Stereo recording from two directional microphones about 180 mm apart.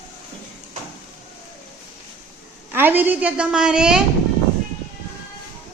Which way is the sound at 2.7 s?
10° right (ahead or behind).